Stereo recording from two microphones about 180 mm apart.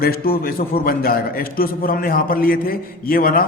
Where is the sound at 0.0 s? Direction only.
55° left (ahead or behind).